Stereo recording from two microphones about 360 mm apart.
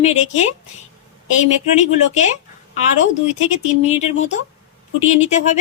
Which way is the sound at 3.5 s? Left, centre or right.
Centre.